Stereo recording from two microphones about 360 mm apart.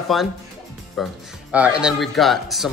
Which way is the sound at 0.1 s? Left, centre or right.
Centre.